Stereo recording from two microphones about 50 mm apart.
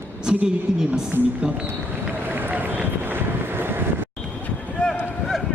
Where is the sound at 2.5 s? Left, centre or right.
Right.